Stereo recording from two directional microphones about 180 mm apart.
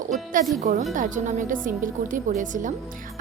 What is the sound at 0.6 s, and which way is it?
A woman's voice, 50° right (ahead or behind).